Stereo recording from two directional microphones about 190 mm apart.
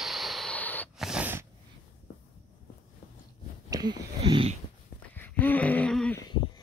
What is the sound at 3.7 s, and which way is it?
Speech, 20° right (ahead or behind).